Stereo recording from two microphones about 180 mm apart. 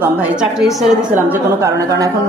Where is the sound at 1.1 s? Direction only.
15° right (ahead or behind).